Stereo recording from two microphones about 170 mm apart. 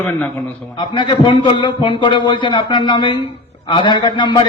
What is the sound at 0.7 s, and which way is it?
A man's voice, 25° left (ahead or behind).